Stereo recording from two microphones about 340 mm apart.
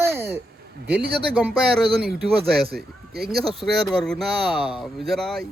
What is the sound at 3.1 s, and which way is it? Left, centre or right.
Speech, right.